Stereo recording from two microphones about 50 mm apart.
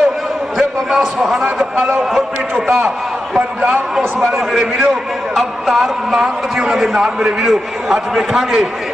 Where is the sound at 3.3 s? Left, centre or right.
Right.